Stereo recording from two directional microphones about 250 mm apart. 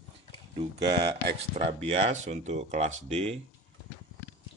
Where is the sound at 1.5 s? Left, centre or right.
Right.